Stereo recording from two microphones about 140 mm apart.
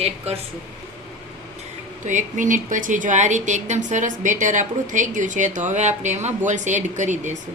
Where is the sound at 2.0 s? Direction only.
65° right (ahead or behind).